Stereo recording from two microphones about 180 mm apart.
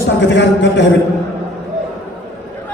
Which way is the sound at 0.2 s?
80° left.